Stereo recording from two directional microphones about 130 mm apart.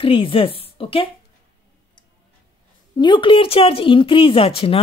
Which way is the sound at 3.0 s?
40° left (ahead or behind).